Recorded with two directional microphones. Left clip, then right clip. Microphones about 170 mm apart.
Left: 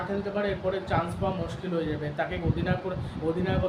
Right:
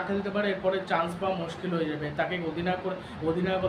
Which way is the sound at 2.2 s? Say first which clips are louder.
Right 2 dB; centre (ahead or behind).